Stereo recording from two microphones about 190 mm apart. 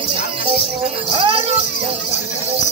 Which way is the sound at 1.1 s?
30° right (ahead or behind).